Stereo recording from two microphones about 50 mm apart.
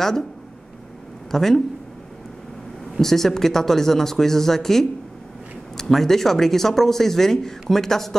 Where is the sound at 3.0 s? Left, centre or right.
Centre.